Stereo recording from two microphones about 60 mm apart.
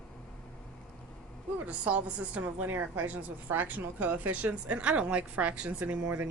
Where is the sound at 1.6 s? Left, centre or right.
Right.